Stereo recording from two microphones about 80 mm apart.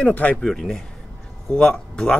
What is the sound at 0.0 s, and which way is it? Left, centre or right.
Speech, centre.